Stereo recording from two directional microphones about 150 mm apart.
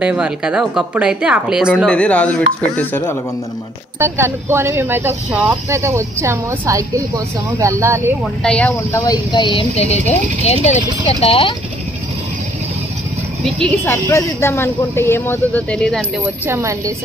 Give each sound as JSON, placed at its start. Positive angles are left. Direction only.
{"t": 0.0, "sound": "speech", "side_deg": -5}
{"t": 1.9, "sound": "speech", "side_deg": 10}
{"t": 4.0, "sound": "speech", "side_deg": -15}
{"t": 8.4, "sound": "speech", "side_deg": 5}
{"t": 9.0, "sound": "a woman's voice", "side_deg": 30}
{"t": 13.5, "sound": "a woman's voice", "side_deg": 5}
{"t": 13.8, "sound": "speech", "side_deg": 15}
{"t": 16.4, "sound": "speech", "side_deg": -20}